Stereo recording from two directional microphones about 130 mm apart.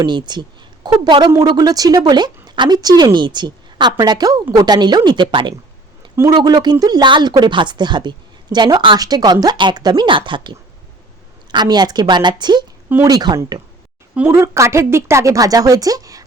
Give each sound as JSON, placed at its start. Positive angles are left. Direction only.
{"t": 0.0, "sound": "speech", "side_deg": -35}
{"t": 6.1, "sound": "speech", "side_deg": -30}
{"t": 14.3, "sound": "speech", "side_deg": -20}